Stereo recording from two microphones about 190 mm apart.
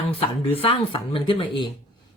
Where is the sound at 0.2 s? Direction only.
30° left (ahead or behind).